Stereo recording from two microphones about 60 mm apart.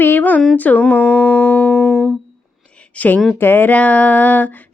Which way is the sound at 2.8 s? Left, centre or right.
Left.